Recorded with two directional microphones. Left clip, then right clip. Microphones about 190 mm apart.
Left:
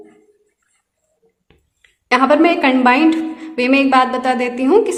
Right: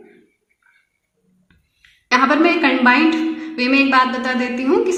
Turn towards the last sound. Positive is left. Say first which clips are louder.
# left 4 dB
turn(degrees=35)  # may be behind; listen again after turning